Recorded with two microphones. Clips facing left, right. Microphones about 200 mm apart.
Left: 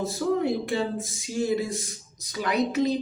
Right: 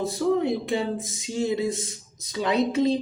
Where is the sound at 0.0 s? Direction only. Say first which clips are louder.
Right 2 dB; 20° right (ahead or behind).